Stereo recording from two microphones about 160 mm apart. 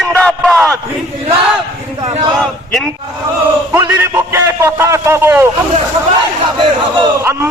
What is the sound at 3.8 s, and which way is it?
A man's voice, 20° right (ahead or behind).